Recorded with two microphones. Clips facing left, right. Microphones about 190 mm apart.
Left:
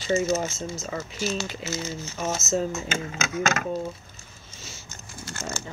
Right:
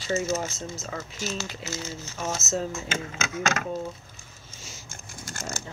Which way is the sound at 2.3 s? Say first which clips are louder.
Left 4 dB; centre (ahead or behind).